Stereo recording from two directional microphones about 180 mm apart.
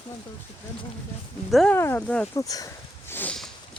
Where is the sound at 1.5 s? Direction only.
Centre (ahead or behind).